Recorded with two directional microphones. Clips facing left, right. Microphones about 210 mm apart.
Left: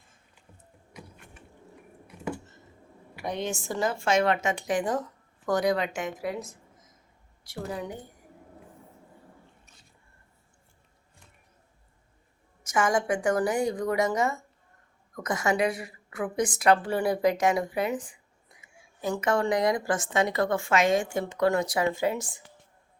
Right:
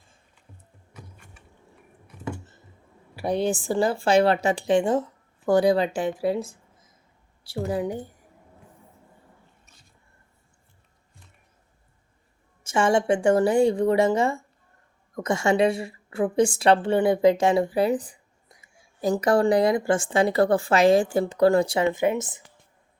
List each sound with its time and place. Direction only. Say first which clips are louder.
2.0 s computer keyboard: even; 10° left (ahead or behind)
3.2 s speech: right 7 dB; 35° right (ahead or behind)
12.6 s a woman's voice: right 5 dB; 30° right (ahead or behind)